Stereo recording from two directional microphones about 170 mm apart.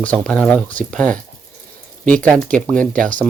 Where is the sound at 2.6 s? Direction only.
5° left (ahead or behind).